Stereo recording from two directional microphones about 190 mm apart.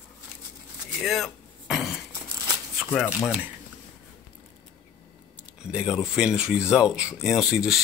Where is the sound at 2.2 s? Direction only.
20° right (ahead or behind).